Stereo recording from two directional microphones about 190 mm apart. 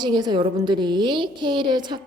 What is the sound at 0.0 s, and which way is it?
A woman's voice, 25° right (ahead or behind).